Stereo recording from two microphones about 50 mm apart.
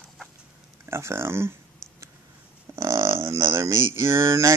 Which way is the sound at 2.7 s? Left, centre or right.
Right.